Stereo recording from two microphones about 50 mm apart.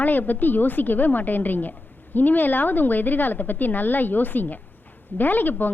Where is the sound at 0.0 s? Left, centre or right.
Left.